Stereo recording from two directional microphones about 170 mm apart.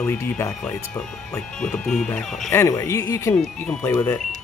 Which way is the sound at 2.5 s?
15° left (ahead or behind).